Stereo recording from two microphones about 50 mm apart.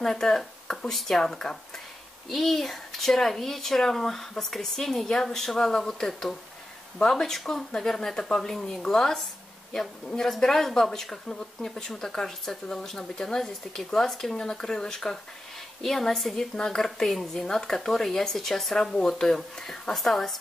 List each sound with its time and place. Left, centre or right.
0.0 s speech: centre